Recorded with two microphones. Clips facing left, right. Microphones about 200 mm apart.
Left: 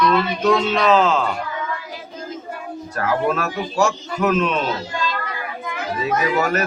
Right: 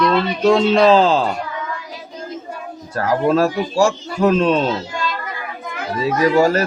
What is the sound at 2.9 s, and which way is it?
Speech, 30° right (ahead or behind).